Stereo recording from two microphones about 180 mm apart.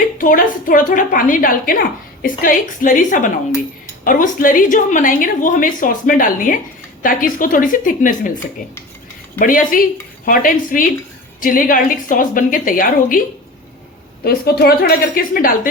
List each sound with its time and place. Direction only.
0.2 s a woman's voice: 50° left (ahead or behind)
9.4 s a woman's voice: 50° left (ahead or behind)
14.3 s a woman's voice: 60° left (ahead or behind)